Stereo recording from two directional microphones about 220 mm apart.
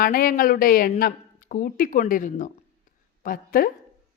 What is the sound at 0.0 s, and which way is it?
A woman's voice, 40° left (ahead or behind).